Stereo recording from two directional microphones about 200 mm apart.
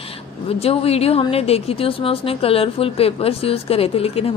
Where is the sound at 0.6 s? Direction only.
30° left (ahead or behind).